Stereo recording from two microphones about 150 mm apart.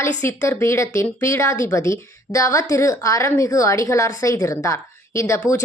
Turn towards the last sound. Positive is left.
turn(degrees=20)  # may be behind; listen again after turning